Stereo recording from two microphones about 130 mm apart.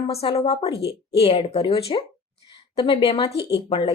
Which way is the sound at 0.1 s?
50° left (ahead or behind).